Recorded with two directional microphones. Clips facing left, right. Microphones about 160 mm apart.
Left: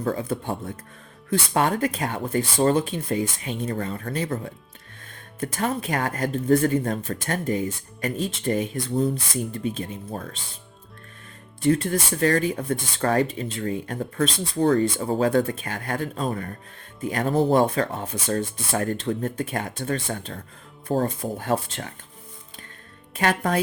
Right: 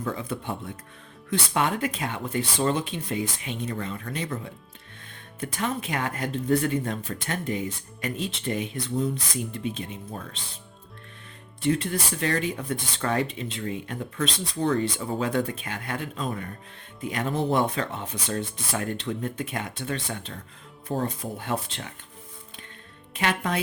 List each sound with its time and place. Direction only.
0.0 s speech: 40° left (ahead or behind)
11.6 s speech: 45° left (ahead or behind)
23.1 s speech: 45° left (ahead or behind)